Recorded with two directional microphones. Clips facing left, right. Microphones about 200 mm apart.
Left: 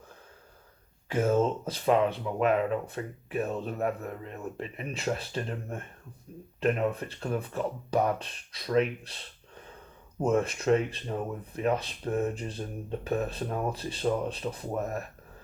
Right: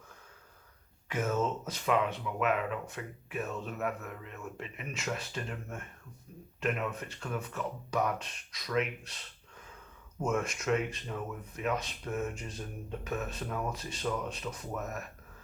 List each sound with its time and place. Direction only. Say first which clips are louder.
1.0 s speech: left 6 dB; 30° left (ahead or behind)